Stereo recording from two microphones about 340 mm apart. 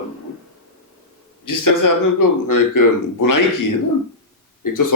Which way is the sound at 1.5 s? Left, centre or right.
Left.